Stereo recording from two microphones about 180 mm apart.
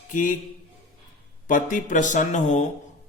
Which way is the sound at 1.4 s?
45° left (ahead or behind).